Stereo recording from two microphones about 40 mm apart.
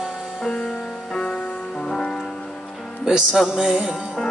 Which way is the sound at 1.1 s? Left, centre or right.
Left.